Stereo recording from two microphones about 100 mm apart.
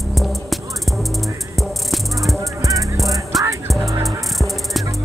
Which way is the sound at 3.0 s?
Centre (ahead or behind).